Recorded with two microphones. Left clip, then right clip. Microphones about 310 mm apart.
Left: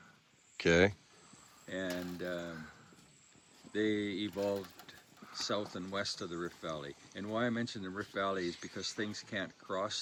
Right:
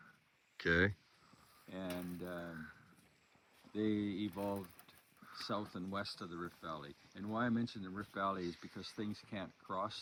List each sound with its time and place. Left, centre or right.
0.5 s speech: centre
1.7 s speech: centre
2.4 s a sound: centre
3.7 s speech: centre